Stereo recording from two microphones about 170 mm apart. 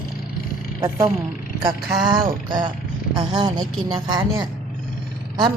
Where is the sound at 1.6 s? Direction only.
25° right (ahead or behind).